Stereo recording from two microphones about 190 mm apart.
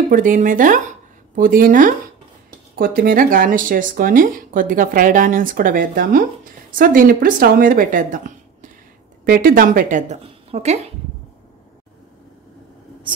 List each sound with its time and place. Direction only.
0.1 s speech: 45° right (ahead or behind)
9.2 s a woman's voice: 50° right (ahead or behind); by 10.8 s 35° right (ahead or behind)